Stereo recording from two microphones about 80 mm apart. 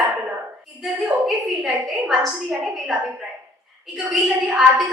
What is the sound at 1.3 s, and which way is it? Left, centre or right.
A woman's voice, centre.